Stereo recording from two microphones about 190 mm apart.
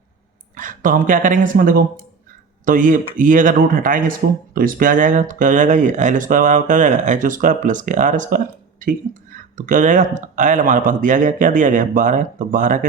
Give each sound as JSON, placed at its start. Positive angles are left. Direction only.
{"t": 0.5, "sound": "speech", "side_deg": -45}
{"t": 9.6, "sound": "speech", "side_deg": -45}